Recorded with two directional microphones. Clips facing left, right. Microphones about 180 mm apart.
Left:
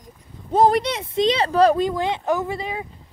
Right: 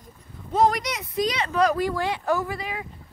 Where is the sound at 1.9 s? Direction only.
20° left (ahead or behind).